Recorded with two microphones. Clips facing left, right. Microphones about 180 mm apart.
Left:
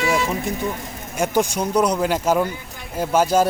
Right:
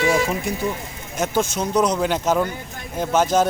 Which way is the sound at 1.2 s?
15° left (ahead or behind).